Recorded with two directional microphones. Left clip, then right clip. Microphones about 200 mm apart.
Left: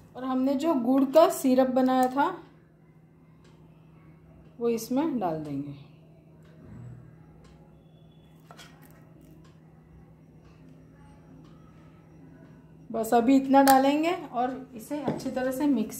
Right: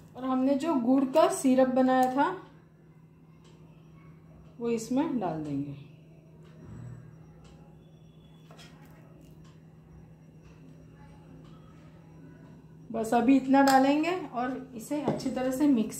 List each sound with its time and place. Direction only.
0.1 s speech: 50° left (ahead or behind)
4.6 s speech: 45° left (ahead or behind)
12.9 s speech: 50° left (ahead or behind)